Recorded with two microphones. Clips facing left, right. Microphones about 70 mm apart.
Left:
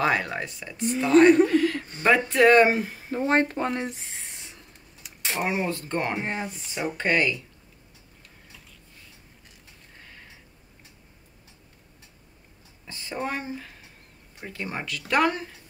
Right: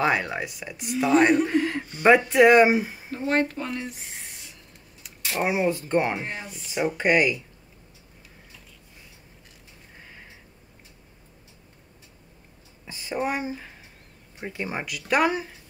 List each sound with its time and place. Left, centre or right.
0.0 s speech: centre
1.5 s a sound: right
2.0 s speech: centre
3.1 s speech: left
3.6 s speech: left
4.1 s a sound: left
5.4 s speech: centre
6.2 s speech: left
7.0 s speech: centre
9.9 s a sound: centre
12.8 s speech: centre